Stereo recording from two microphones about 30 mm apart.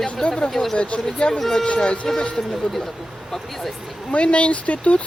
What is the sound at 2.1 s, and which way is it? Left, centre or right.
Speech, centre.